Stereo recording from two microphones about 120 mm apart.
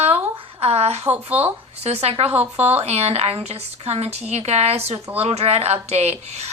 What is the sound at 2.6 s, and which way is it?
A woman's voice, 60° right (ahead or behind).